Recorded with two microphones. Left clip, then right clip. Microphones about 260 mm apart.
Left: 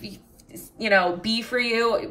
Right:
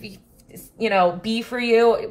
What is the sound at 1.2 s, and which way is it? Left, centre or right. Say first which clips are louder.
Speech: even; left.